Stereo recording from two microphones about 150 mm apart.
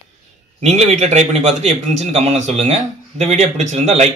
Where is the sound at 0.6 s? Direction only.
45° right (ahead or behind).